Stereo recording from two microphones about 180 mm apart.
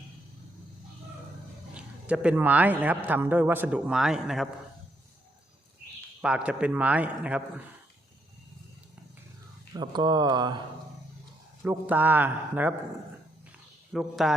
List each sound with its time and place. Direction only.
1.7 s speech: 5° right (ahead or behind)
6.2 s speech: 5° right (ahead or behind)
9.7 s speech: 25° right (ahead or behind)
11.6 s speech: 10° right (ahead or behind)
13.9 s speech: centre (ahead or behind)